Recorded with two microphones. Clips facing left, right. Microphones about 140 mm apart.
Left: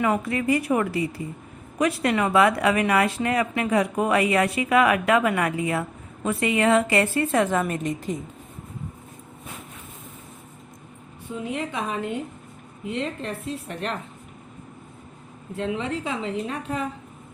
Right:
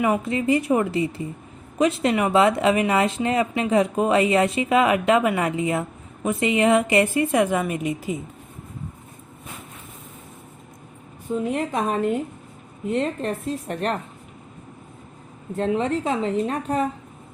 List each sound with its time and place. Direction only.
0.0 s a woman's voice: 20° right (ahead or behind)
11.4 s speech: 45° right (ahead or behind)
15.5 s a woman's voice: 40° right (ahead or behind)